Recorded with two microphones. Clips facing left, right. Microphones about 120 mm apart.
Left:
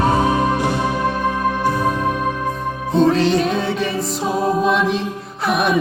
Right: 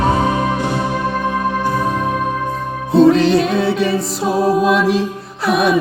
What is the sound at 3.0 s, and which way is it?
Music, 5° right (ahead or behind).